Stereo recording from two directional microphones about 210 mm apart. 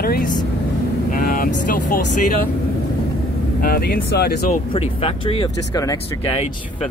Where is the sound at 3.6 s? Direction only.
45° left (ahead or behind).